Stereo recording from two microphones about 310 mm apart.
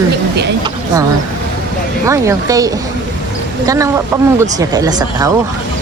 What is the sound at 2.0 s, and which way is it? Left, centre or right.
Speech, centre.